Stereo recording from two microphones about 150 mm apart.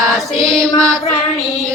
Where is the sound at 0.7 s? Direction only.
20° right (ahead or behind).